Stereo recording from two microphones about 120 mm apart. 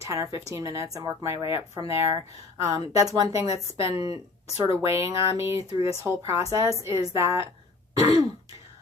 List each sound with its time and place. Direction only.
0.0 s a woman's voice: 25° right (ahead or behind)